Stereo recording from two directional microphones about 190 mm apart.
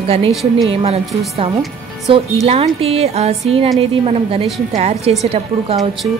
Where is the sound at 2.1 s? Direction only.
30° right (ahead or behind).